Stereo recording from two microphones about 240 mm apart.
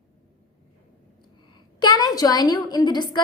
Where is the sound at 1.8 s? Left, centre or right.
Centre.